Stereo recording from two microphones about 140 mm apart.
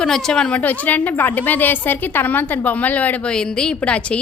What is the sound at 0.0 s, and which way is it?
A woman's voice, 5° left (ahead or behind).